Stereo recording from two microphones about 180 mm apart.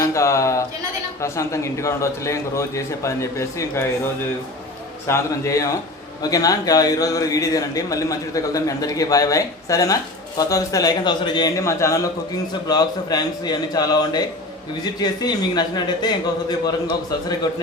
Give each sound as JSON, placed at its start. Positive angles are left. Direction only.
{"t": 0.0, "sound": "a sound", "side_deg": 15}
{"t": 1.2, "sound": "a man's voice", "side_deg": 15}
{"t": 5.0, "sound": "a man's voice", "side_deg": 15}